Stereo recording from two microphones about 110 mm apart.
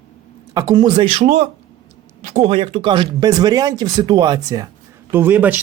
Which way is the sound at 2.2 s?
75° right (ahead or behind).